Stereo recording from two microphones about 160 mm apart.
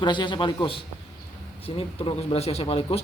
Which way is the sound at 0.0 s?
30° left (ahead or behind).